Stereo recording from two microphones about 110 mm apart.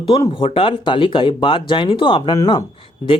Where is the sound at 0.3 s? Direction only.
55° left (ahead or behind).